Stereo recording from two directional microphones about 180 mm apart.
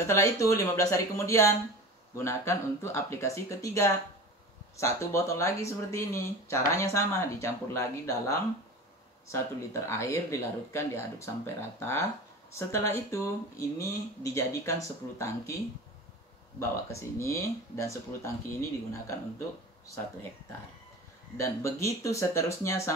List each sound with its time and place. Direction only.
0.0 s speech: 15° left (ahead or behind)
9.8 s speech: 15° left (ahead or behind)
17.2 s speech: 15° left (ahead or behind)
21.4 s speech: 15° left (ahead or behind)